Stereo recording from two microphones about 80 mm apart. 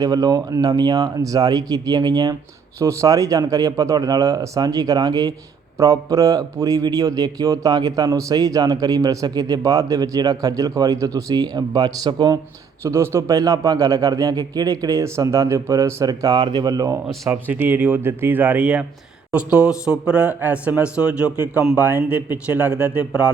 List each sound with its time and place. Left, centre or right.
0.0 s a man's voice: right
2.7 s a man's voice: right
5.7 s a man's voice: right
12.8 s a man's voice: right
13.2 s a man's voice: right
17.4 s a man's voice: right